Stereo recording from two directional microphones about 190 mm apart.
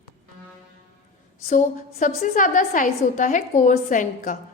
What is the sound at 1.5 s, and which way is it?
A woman's voice, 45° left (ahead or behind).